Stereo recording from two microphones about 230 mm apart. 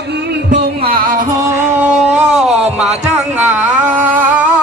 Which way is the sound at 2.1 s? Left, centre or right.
Right.